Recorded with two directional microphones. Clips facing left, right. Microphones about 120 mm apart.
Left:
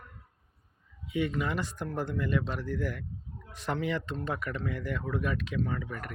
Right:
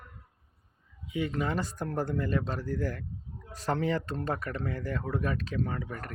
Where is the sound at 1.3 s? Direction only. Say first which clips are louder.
Right 1 dB; 35° right (ahead or behind).